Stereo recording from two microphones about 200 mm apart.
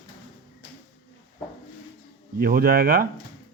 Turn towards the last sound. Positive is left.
turn(degrees=-50)  # may be behind; listen again after turning